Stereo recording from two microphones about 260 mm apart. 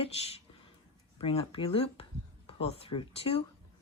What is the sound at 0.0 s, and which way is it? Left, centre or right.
Speech, left.